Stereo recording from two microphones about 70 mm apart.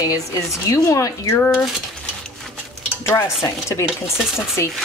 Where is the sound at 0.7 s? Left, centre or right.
Left.